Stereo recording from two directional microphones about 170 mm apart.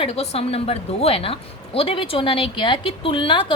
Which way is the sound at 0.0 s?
35° left (ahead or behind).